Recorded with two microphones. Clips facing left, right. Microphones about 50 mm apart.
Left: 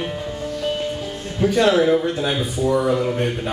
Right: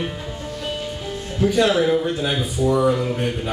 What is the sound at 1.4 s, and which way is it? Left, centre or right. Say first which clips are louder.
Speech: left 1 dB; centre.